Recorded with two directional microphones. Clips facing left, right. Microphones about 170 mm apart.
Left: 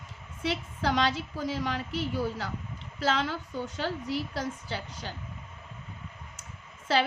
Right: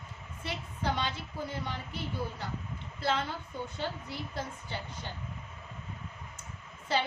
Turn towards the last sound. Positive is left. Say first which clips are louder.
# left 5 dB
turn(degrees=90)